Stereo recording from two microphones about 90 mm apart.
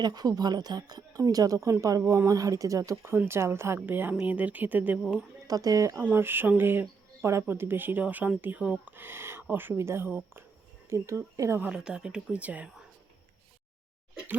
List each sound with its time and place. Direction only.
0.0 s speech: 45° right (ahead or behind)
3.0 s speech: 25° right (ahead or behind)
5.5 s speech: 40° right (ahead or behind)
6.0 s speech: 25° right (ahead or behind)
10.8 s speech: 35° right (ahead or behind)
11.7 s speech: 10° right (ahead or behind)